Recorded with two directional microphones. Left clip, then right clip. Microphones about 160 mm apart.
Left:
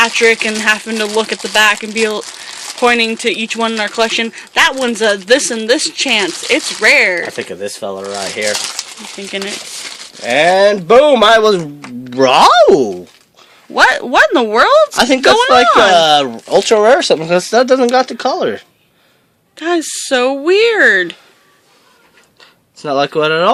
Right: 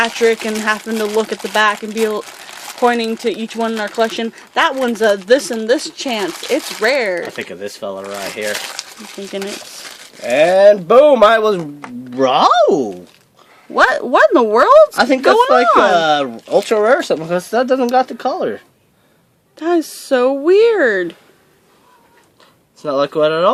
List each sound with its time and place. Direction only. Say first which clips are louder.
0.0 s speech: left 4 dB; 5° right (ahead or behind)
7.3 s speech: left 4 dB; 50° left (ahead or behind)
9.3 s speech: left 3 dB; 5° right (ahead or behind)
10.2 s speech: left 1 dB; 50° left (ahead or behind)
13.7 s speech: left 2 dB; 5° right (ahead or behind)
14.9 s speech: left 2 dB; 40° left (ahead or behind)
15.2 s speech: left 3 dB; 5° right (ahead or behind)
15.9 s speech: left 4 dB; 35° left (ahead or behind)
19.5 s speech: left 1 dB; 10° right (ahead or behind)
22.8 s speech: left 1 dB; 50° left (ahead or behind)